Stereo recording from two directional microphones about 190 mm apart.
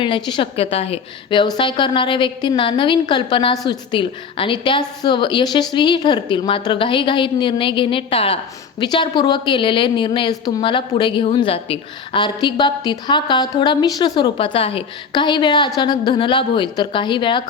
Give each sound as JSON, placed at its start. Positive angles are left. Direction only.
{"t": 0.0, "sound": "a woman's voice", "side_deg": 25}